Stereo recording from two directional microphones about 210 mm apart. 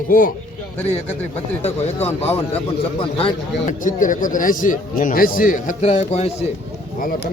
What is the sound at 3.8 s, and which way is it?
A man's voice, 40° left (ahead or behind).